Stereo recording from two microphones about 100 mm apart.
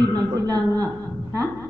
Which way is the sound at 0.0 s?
40° right (ahead or behind).